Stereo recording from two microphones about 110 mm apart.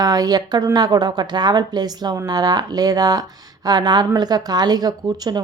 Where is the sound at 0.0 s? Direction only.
35° right (ahead or behind).